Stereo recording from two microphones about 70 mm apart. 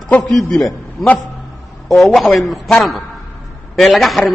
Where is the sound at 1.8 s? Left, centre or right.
Centre.